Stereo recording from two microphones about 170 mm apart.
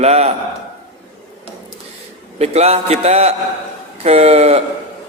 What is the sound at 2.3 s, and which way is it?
A man's voice, 40° right (ahead or behind).